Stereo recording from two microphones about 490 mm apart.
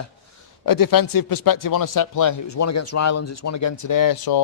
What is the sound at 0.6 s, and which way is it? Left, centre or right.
Speech, left.